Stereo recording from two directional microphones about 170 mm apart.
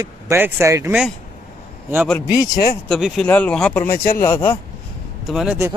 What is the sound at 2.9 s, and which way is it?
Speech, centre (ahead or behind).